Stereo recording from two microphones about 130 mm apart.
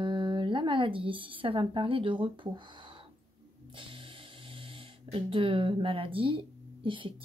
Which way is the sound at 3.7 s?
40° right (ahead or behind).